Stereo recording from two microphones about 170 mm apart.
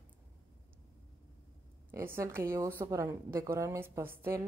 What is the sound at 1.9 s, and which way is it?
A woman's voice, 15° right (ahead or behind).